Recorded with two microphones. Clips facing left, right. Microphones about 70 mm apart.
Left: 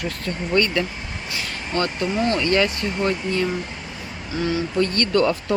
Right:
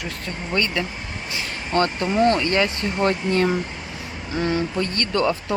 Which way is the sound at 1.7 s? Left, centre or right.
Right.